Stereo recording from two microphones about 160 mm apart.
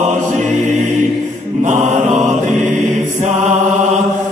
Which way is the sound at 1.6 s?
50° right (ahead or behind).